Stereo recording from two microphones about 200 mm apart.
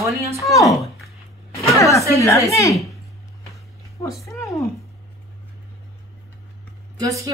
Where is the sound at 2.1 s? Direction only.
15° left (ahead or behind).